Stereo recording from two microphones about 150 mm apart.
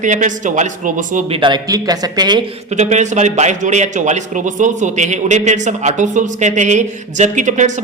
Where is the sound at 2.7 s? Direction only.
50° right (ahead or behind).